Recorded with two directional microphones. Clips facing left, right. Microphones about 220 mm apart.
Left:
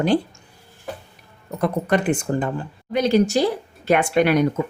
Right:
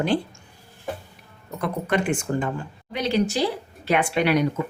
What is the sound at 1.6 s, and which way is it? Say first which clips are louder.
Speech: left 4 dB; 40° left (ahead or behind).